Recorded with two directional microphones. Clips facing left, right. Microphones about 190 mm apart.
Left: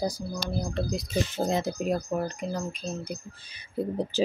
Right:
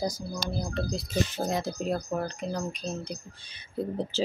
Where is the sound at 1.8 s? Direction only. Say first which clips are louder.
Left 2 dB; 10° left (ahead or behind).